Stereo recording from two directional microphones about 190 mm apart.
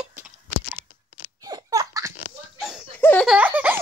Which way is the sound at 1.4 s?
20° right (ahead or behind).